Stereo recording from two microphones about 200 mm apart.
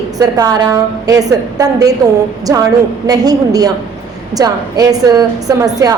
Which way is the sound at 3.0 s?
20° right (ahead or behind).